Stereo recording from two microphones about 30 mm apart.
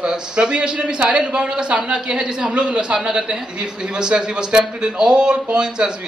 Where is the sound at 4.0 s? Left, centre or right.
Right.